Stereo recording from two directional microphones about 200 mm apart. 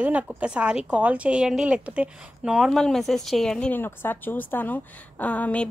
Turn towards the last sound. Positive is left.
turn(degrees=5)  # may be behind; listen again after turning